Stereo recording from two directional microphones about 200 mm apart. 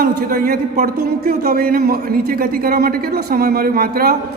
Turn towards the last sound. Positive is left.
turn(degrees=-50)  # may be behind; listen again after turning